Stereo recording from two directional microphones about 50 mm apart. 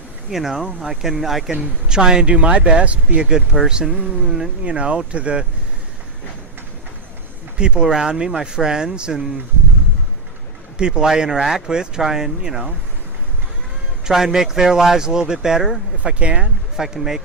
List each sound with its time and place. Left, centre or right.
0.3 s speech: centre; by 5.5 s right
7.6 s speech: centre
10.8 s speech: centre
14.0 s speech: centre
16.0 s speech: right
16.7 s speech: centre